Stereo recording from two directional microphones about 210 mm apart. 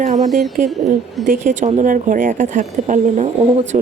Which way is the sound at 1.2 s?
35° right (ahead or behind).